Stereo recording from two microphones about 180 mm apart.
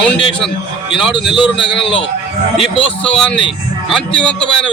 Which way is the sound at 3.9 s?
5° left (ahead or behind).